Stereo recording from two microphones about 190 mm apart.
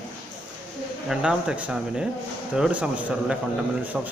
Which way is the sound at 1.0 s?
5° right (ahead or behind).